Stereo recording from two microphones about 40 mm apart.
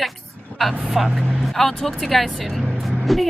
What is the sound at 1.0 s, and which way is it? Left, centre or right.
A woman's voice, centre.